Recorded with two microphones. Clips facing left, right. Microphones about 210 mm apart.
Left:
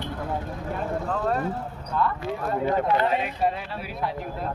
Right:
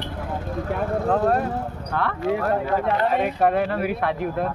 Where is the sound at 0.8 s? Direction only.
65° right (ahead or behind).